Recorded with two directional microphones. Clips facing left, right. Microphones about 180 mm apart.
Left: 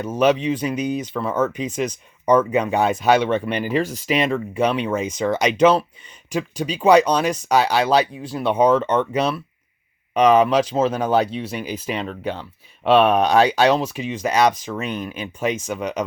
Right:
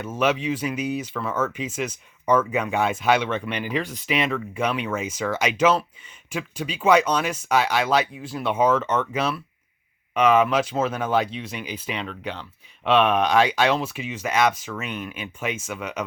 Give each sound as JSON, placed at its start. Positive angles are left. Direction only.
{"t": 0.0, "sound": "speech", "side_deg": 35}